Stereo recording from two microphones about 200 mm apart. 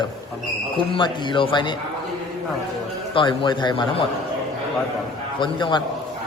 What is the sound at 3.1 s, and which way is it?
Speech, 25° left (ahead or behind).